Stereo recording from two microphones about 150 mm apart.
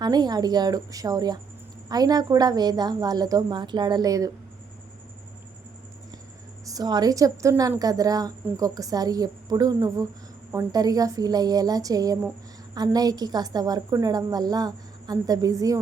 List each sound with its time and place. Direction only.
0.0 s a woman's voice: 25° right (ahead or behind)
6.7 s a woman's voice: 25° right (ahead or behind)